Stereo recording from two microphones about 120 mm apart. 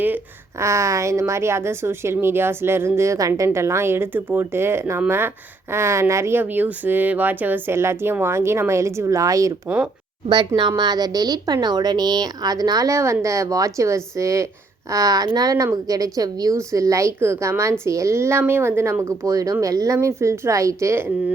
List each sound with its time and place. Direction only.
0.6 s a woman's voice: 25° right (ahead or behind)
9.6 s speech: 10° right (ahead or behind)
10.2 s a woman's voice: 40° right (ahead or behind); by 21.1 s 20° right (ahead or behind)